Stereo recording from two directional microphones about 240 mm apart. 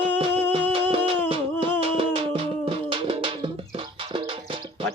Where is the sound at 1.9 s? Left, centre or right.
Right.